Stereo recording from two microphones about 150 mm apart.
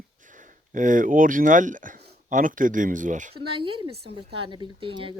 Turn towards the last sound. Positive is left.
turn(degrees=-35)  # may be behind; listen again after turning